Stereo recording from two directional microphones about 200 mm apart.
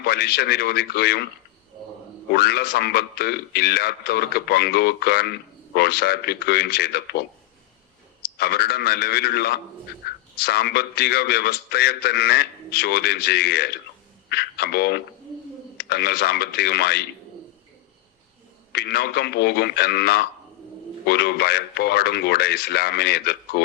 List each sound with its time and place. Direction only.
0.0 s a man's voice: 55° left (ahead or behind)
2.3 s a man's voice: 55° left (ahead or behind)
8.4 s a man's voice: 55° left (ahead or behind)
18.7 s a man's voice: 55° left (ahead or behind)